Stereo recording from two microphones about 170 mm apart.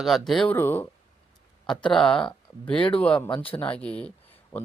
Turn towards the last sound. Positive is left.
turn(degrees=10)  # may be behind; listen again after turning